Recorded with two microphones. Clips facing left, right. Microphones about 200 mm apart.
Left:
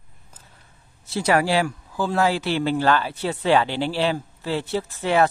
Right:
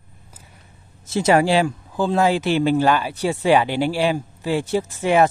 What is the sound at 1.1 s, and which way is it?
Speech, 20° right (ahead or behind).